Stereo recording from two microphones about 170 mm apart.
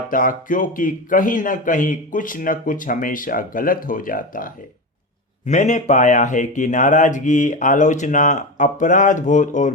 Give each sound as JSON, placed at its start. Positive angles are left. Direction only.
{"t": 0.1, "sound": "a man's voice", "side_deg": 50}